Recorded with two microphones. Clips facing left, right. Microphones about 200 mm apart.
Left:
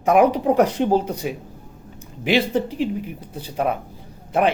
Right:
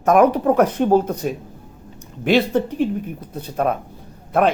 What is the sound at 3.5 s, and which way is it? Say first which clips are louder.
Speech: right 2 dB; 10° left (ahead or behind).